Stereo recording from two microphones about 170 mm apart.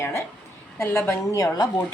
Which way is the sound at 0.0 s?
15° left (ahead or behind).